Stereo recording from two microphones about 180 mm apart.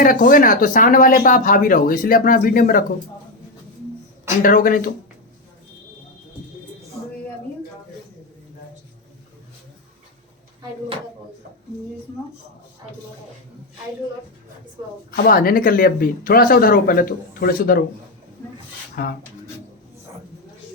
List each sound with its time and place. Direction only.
0.0 s speech: 50° left (ahead or behind)
4.4 s speech: 50° left (ahead or behind)
15.1 s speech: 55° left (ahead or behind)
19.0 s speech: 55° left (ahead or behind)